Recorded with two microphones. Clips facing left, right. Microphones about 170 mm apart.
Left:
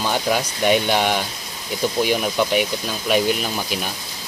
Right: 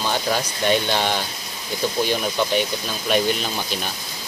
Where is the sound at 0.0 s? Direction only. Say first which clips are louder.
Left 2 dB; 10° left (ahead or behind).